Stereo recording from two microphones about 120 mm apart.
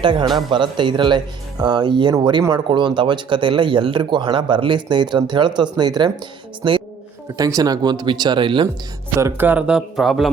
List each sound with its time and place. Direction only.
0.0 s a woman's voice: 40° right (ahead or behind)
7.3 s speech: 30° right (ahead or behind)
9.1 s speech: 20° right (ahead or behind); by 10.3 s centre (ahead or behind)